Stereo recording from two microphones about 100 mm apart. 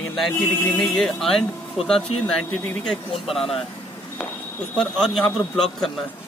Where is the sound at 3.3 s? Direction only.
75° left (ahead or behind).